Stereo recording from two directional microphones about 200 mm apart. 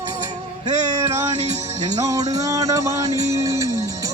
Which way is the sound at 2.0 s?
15° right (ahead or behind).